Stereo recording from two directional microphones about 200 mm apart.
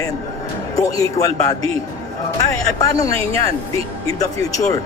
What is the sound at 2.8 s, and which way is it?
A man's voice, 15° left (ahead or behind).